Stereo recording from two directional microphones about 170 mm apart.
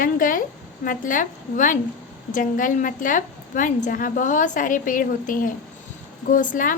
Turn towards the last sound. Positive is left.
turn(degrees=50)  # may be behind; listen again after turning